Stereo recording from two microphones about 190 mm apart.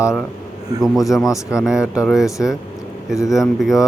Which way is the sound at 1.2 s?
15° left (ahead or behind).